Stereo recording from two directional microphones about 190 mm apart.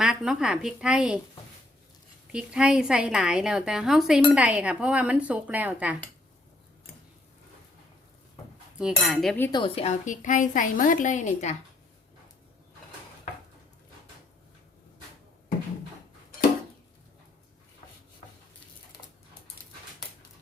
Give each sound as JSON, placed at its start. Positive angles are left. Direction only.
{"t": 0.0, "sound": "a woman's voice", "side_deg": -5}
{"t": 2.3, "sound": "a woman's voice", "side_deg": -5}
{"t": 8.8, "sound": "a woman's voice", "side_deg": 0}
{"t": 9.5, "sound": "a woman's voice", "side_deg": 25}
{"t": 10.1, "sound": "a woman's voice", "side_deg": 40}